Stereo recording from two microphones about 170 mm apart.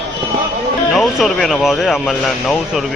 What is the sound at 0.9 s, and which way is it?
Speech, centre (ahead or behind).